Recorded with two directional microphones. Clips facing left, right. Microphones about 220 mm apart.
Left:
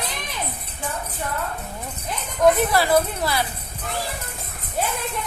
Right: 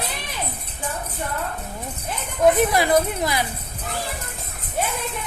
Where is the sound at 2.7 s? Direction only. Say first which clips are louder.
Even; 15° right (ahead or behind).